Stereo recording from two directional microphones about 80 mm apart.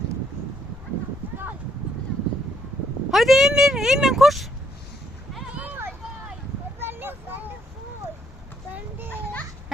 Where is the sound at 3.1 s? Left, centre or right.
Centre.